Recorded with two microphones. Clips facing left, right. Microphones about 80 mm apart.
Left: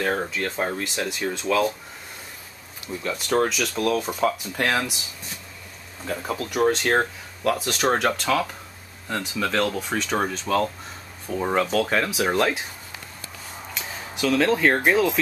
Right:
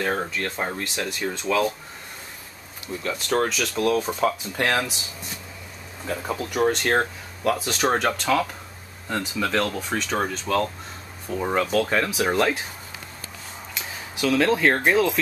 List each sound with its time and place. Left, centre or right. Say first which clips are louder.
0.0 s speech: left 1 dB; centre
3.0 s speech: left 1 dB; centre
6.0 s speech: even; centre
13.7 s a sound: even; centre
14.9 s speech: even; centre